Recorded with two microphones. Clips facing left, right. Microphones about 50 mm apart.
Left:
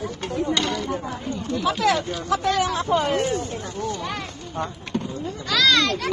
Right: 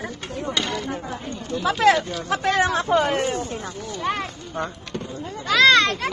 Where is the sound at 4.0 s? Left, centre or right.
Right.